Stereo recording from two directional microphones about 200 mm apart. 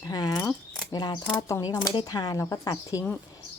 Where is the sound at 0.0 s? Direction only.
20° left (ahead or behind).